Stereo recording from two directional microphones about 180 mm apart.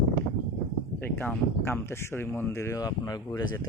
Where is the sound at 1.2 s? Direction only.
10° left (ahead or behind).